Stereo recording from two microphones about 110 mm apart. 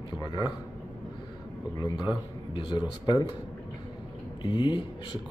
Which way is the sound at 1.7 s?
40° left (ahead or behind).